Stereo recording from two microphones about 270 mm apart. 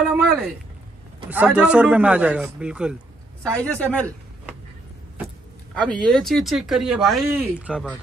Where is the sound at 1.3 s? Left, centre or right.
Centre.